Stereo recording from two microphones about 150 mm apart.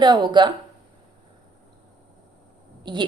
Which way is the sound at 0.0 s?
30° right (ahead or behind).